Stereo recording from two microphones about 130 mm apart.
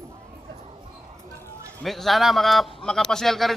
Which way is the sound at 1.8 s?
Centre (ahead or behind).